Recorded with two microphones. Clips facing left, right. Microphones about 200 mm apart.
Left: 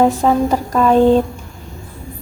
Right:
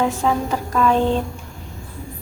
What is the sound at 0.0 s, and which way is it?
Speech, 40° left (ahead or behind).